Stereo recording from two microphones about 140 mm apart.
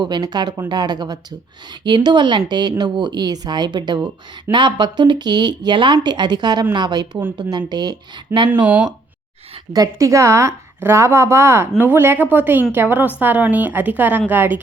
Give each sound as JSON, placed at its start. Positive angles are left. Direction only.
{"t": 0.0, "sound": "speech", "side_deg": -30}
{"t": 8.6, "sound": "a woman's voice", "side_deg": -10}
{"t": 9.7, "sound": "a woman's voice", "side_deg": -25}